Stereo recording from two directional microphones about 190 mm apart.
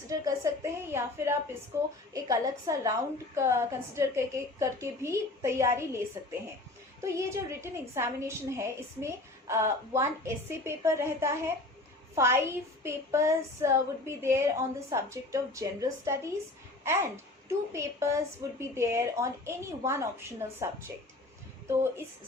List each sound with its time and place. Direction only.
0.1 s a woman's voice: 15° right (ahead or behind)
7.0 s a woman's voice: 15° right (ahead or behind)